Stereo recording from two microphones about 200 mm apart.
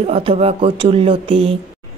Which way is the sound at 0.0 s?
30° right (ahead or behind).